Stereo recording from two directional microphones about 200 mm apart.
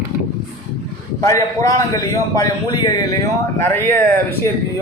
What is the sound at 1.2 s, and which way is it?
A man's voice, 15° left (ahead or behind).